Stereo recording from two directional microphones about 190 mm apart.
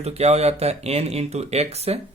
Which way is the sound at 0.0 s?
35° right (ahead or behind).